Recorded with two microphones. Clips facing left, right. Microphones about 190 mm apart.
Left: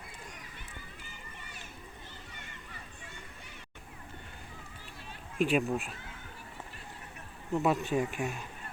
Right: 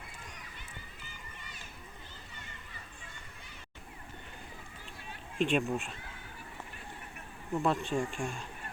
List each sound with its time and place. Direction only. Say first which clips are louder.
5.4 s speech: left 1 dB; 5° left (ahead or behind)
7.6 s speech: left 2 dB; 5° left (ahead or behind)